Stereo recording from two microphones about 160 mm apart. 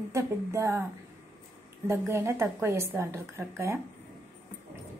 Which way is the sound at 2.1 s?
15° right (ahead or behind).